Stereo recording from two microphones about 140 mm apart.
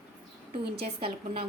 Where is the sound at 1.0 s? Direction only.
40° right (ahead or behind).